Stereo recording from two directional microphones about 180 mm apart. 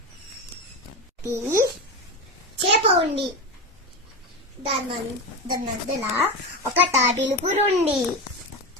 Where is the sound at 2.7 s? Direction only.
35° right (ahead or behind).